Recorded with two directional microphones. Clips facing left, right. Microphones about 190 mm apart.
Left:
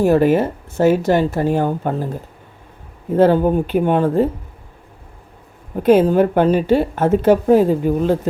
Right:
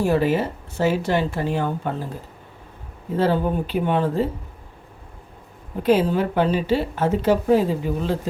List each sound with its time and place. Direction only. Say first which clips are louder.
0.0 s speech: left 6 dB; 50° left (ahead or behind)
3.2 s speech: left 7 dB; 50° left (ahead or behind)
5.8 s speech: left 6 dB; 50° left (ahead or behind)